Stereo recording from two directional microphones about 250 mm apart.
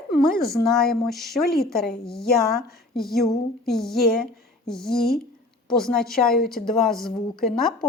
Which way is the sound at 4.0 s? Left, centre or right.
Left.